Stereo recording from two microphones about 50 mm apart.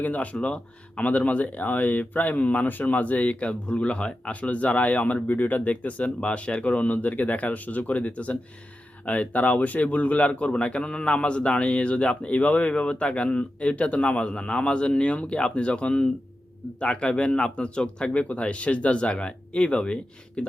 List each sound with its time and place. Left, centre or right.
0.0 s speech: left